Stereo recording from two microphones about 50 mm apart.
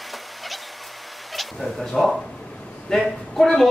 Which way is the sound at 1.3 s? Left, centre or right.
Centre.